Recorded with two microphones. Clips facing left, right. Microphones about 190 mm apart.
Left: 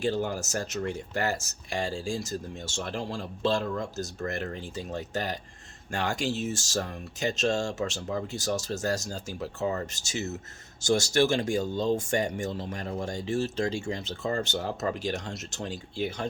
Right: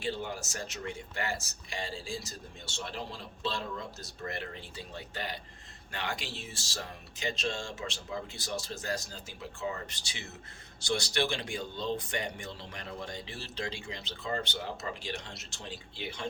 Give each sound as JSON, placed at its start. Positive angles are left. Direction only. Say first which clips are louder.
{"t": 0.0, "sound": "speech", "louder": "left 7 dB", "side_deg": 40}